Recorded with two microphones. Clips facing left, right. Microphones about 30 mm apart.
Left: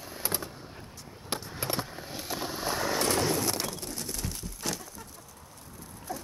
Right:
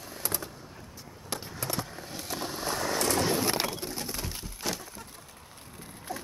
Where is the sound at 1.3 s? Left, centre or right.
Left.